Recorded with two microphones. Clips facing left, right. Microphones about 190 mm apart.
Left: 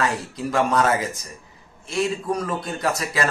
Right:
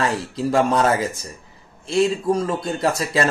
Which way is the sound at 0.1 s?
30° right (ahead or behind).